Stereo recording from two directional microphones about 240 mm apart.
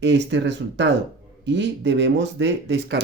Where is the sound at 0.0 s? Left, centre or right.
Right.